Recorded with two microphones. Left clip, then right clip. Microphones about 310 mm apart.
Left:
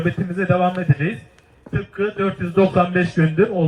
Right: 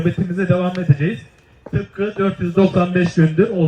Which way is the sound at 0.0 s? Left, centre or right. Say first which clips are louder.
Right 1 dB; left.